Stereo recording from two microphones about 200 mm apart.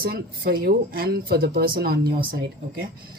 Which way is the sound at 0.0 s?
50° right (ahead or behind).